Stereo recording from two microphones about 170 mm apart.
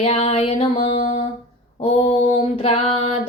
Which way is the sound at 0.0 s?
35° left (ahead or behind).